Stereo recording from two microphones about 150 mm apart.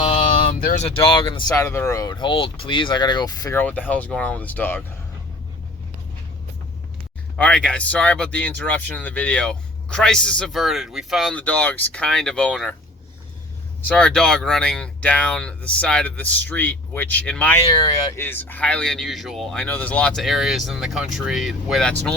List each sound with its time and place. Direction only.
0.0 s a sound: 45° left (ahead or behind)
0.4 s a sound: 75° left (ahead or behind)
0.8 s speech: 40° left (ahead or behind)
1.5 s speech: 20° left (ahead or behind)
3.6 s speech: 10° left (ahead or behind)
7.3 s speech: 5° left (ahead or behind)
13.8 s speech: 5° left (ahead or behind)
17.6 s speech: 25° left (ahead or behind)
18.2 s speech: 15° left (ahead or behind)